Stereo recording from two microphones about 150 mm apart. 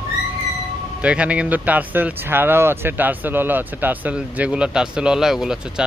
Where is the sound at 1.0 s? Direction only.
10° right (ahead or behind).